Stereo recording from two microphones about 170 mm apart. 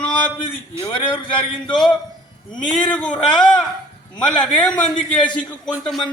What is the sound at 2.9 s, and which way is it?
A man's voice, 5° left (ahead or behind).